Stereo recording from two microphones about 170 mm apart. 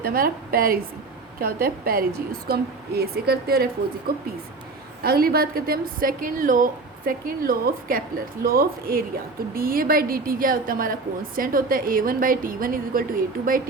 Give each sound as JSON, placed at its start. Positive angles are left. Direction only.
{"t": 0.0, "sound": "a woman's voice", "side_deg": -60}
{"t": 5.0, "sound": "a woman's voice", "side_deg": -60}